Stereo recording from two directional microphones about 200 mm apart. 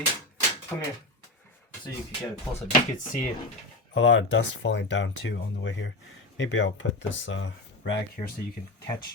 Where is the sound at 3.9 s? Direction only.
70° left (ahead or behind).